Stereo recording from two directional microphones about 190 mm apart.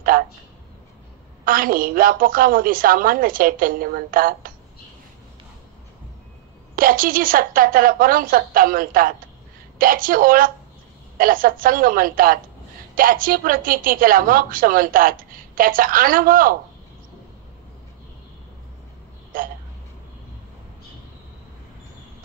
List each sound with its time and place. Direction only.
1.4 s a woman's voice: 50° right (ahead or behind)
6.7 s a woman's voice: 50° right (ahead or behind)
19.3 s a woman's voice: 50° right (ahead or behind)